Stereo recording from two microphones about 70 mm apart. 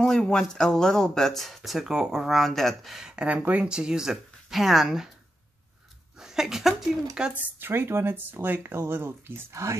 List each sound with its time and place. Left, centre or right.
0.0 s speech: centre
6.1 s a sound: centre
7.2 s speech: centre
7.5 s speech: right
9.5 s speech: right